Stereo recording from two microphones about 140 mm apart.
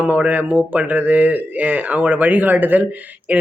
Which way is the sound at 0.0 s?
10° right (ahead or behind).